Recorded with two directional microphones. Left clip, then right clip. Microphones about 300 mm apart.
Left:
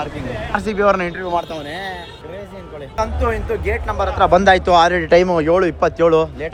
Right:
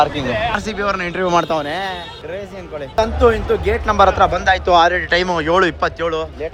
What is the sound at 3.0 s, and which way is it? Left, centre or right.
Speech, centre.